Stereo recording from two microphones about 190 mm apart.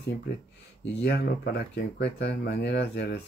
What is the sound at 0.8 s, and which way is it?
Speech, 65° left (ahead or behind).